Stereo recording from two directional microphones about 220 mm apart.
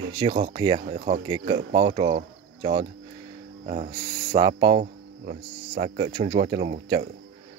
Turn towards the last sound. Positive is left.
turn(degrees=-30)  # may be behind; listen again after turning